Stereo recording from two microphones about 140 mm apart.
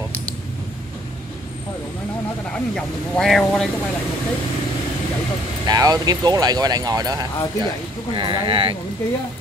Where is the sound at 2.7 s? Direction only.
5° left (ahead or behind).